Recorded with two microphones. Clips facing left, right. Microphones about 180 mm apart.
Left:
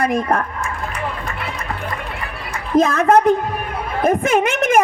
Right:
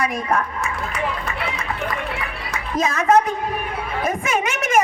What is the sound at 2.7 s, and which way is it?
A man's voice, 55° left (ahead or behind).